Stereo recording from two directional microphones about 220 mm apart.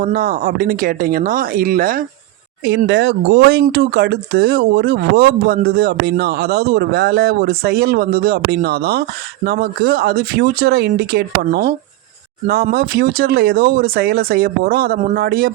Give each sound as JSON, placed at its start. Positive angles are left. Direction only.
{"t": 0.0, "sound": "speech", "side_deg": -40}